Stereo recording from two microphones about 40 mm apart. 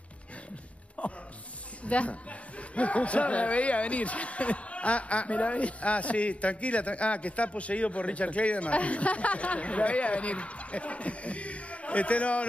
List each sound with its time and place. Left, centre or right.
1.0 s music: left
1.9 s speech: left